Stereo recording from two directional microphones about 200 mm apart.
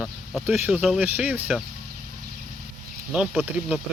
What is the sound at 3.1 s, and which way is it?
Speech, centre (ahead or behind).